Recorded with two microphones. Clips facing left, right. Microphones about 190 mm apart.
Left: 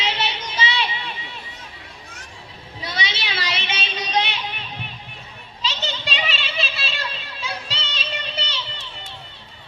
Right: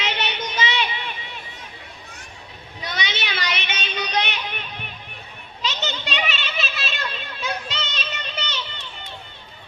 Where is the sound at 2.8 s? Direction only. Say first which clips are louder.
Even; 30° left (ahead or behind).